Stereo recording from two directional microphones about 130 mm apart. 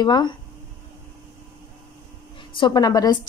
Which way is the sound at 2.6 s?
35° left (ahead or behind).